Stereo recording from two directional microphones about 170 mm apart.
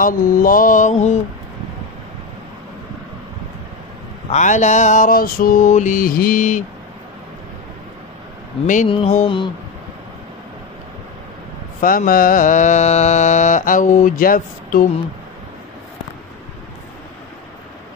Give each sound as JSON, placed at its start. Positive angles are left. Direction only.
{"t": 0.0, "sound": "mantra", "side_deg": 55}
{"t": 4.3, "sound": "mantra", "side_deg": 45}
{"t": 8.8, "sound": "mantra", "side_deg": 30}
{"t": 11.8, "sound": "mantra", "side_deg": 55}